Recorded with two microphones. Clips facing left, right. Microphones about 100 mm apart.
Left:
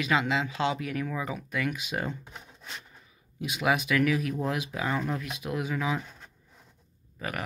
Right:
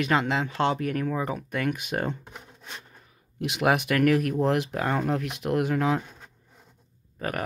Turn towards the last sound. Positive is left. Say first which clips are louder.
# right 4 dB
turn(degrees=-45)  # may be behind; listen again after turning